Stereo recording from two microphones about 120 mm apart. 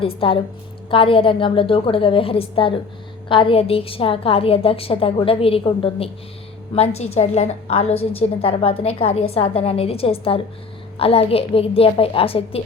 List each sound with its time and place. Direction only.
0.0 s a woman's voice: 50° left (ahead or behind)
6.7 s a woman's voice: 60° left (ahead or behind)